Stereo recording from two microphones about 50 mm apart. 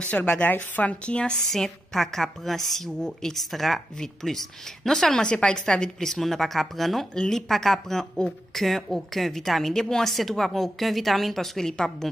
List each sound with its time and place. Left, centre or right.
0.0 s a woman's voice: left
1.5 s a woman's voice: centre